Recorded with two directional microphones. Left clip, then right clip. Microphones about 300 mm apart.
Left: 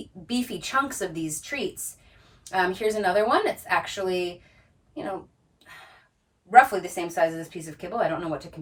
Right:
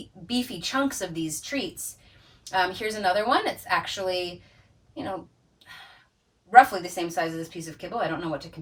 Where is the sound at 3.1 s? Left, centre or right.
Centre.